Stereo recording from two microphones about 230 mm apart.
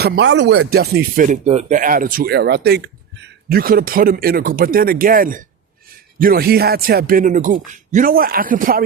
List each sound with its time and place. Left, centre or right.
0.0 s speech: right